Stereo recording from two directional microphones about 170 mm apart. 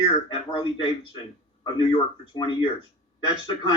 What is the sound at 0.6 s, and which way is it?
Speech, 30° left (ahead or behind).